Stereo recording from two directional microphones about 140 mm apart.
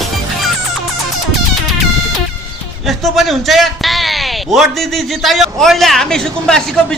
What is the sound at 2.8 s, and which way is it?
A man's voice, centre (ahead or behind).